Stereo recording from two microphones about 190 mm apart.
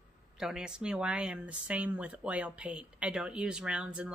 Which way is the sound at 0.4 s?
5° right (ahead or behind).